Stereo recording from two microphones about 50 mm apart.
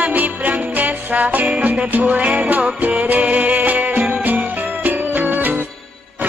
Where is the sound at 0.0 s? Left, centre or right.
Right.